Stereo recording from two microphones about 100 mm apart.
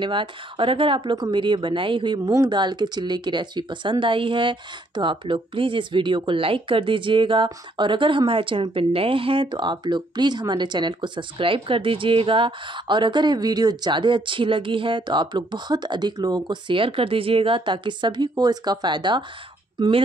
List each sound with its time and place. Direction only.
0.0 s speech: 55° right (ahead or behind)
2.2 s speech: 40° right (ahead or behind)